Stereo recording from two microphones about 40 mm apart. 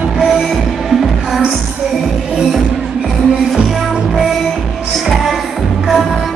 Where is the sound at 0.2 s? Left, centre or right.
Centre.